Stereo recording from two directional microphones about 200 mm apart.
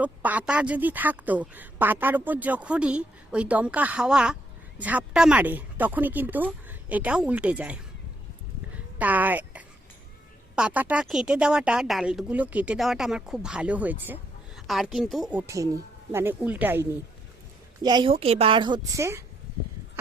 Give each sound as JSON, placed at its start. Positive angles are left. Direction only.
{"t": 0.0, "sound": "a woman's voice", "side_deg": -10}
{"t": 8.7, "sound": "a sound", "side_deg": -10}
{"t": 10.5, "sound": "a woman's voice", "side_deg": -5}
{"t": 17.8, "sound": "a woman's voice", "side_deg": -25}